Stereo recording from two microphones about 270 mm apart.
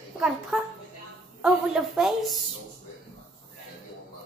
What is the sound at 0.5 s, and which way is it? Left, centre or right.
A woman's voice, centre.